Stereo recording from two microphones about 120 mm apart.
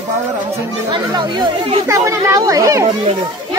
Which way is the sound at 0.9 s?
40° right (ahead or behind).